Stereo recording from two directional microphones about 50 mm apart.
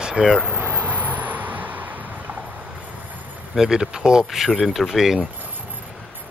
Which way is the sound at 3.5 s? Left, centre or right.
Centre.